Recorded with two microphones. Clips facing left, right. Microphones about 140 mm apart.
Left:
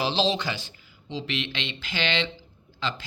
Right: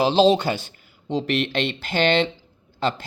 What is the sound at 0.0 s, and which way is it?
Speech, 45° right (ahead or behind).